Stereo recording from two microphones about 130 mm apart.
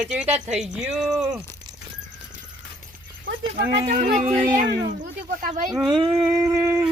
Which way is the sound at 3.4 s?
45° right (ahead or behind).